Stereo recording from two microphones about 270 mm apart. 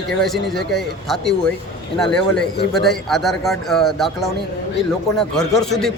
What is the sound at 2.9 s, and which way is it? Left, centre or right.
Speech, centre.